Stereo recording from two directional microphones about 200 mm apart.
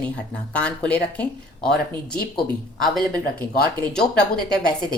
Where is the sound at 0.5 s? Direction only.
5° left (ahead or behind).